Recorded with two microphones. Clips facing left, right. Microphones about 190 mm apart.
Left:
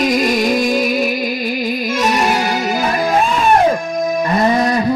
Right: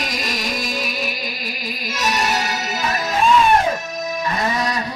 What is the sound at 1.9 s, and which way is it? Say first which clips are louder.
Music: left 4 dB; 55° left (ahead or behind).